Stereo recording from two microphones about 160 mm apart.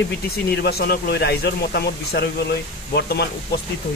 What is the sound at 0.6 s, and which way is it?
Speech, 80° left.